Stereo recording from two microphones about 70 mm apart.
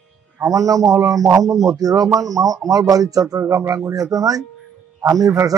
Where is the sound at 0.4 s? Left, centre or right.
Right.